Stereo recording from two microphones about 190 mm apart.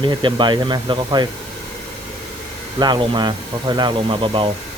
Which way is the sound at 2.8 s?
25° right (ahead or behind).